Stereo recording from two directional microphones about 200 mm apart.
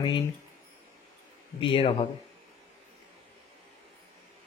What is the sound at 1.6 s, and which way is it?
Speech, 25° left (ahead or behind).